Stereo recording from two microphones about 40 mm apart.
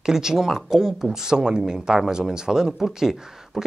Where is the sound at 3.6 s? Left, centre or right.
Centre.